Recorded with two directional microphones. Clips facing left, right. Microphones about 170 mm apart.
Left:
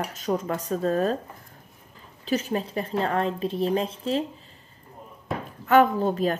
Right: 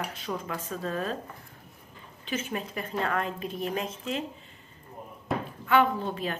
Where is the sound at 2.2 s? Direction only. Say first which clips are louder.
Left 7 dB; 40° left (ahead or behind).